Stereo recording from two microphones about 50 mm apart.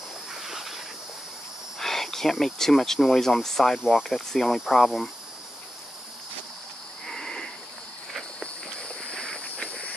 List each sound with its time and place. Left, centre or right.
0.3 s a sound: centre
1.8 s speech: centre
3.8 s speech: centre
7.1 s frog: centre
8.4 s walk: centre
9.4 s a sound: left